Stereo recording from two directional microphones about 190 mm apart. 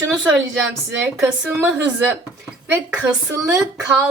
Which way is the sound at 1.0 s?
10° right (ahead or behind).